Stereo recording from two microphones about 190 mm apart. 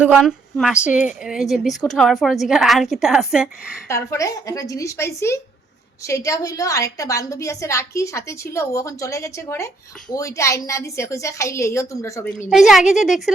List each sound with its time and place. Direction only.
0.0 s a woman's voice: 5° right (ahead or behind)
3.8 s a woman's voice: 15° left (ahead or behind)
12.5 s a woman's voice: centre (ahead or behind)